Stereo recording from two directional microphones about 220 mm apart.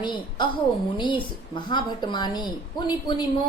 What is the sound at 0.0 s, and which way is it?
A woman's voice, 20° left (ahead or behind).